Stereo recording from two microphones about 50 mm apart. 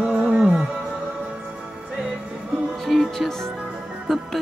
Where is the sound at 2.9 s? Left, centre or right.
Centre.